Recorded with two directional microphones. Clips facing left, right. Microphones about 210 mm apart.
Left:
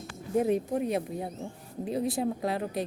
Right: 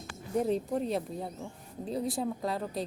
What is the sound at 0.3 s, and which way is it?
Speech, 15° left (ahead or behind).